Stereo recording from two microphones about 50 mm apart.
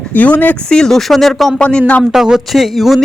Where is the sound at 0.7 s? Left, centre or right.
Centre.